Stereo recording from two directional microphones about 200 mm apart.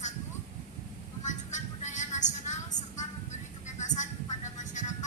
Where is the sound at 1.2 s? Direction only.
35° left (ahead or behind).